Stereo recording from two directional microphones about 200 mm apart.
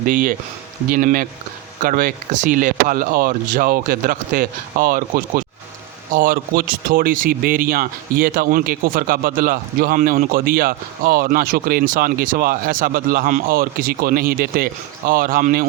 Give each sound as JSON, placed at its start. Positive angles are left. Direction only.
{"t": 0.0, "sound": "speech", "side_deg": -40}